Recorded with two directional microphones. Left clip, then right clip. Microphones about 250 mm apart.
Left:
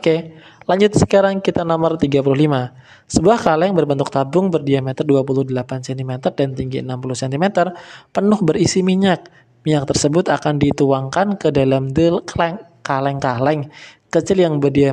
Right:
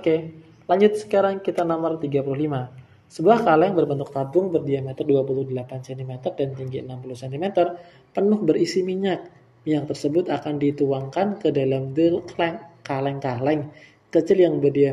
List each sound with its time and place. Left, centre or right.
0.7 s speech: left